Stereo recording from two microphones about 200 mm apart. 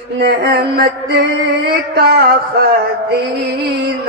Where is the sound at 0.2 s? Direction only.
50° right (ahead or behind).